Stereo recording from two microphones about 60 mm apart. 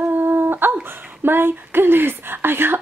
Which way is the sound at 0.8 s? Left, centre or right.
Right.